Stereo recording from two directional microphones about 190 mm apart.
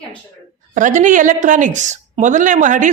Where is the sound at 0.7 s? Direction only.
40° right (ahead or behind).